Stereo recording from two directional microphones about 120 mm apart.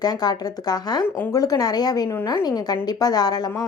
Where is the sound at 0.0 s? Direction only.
35° left (ahead or behind).